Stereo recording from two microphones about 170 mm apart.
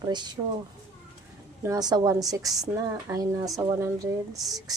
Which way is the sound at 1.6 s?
25° right (ahead or behind).